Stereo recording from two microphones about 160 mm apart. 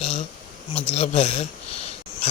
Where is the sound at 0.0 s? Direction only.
40° left (ahead or behind).